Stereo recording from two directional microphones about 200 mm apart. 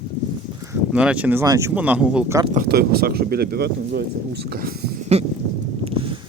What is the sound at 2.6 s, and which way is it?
Speech, 50° right (ahead or behind).